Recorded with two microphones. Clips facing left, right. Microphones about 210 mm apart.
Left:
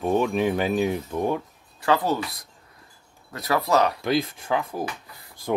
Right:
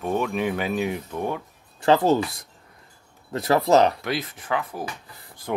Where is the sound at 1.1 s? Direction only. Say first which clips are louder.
Left 3 dB; 10° left (ahead or behind).